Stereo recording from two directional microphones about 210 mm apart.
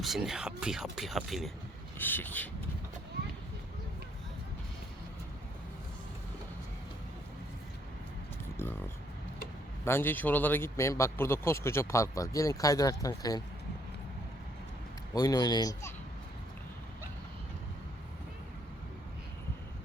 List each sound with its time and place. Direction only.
0.0 s speech: centre (ahead or behind)
9.8 s speech: 10° left (ahead or behind)
15.1 s speech: 20° left (ahead or behind)